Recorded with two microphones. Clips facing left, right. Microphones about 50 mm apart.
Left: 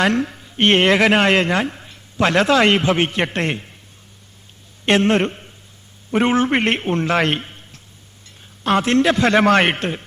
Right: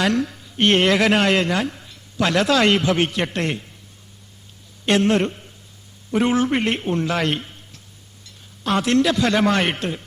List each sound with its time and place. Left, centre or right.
0.0 s speech: left
4.9 s a man's voice: left